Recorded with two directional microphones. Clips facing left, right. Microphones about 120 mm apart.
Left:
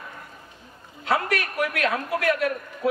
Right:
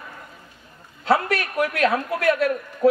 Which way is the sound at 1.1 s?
30° right (ahead or behind).